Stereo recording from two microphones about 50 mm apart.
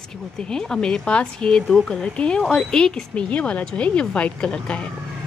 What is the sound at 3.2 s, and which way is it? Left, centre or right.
A woman's voice, left.